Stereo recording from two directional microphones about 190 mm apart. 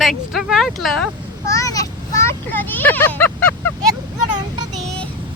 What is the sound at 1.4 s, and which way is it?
Vehicle, 15° left (ahead or behind).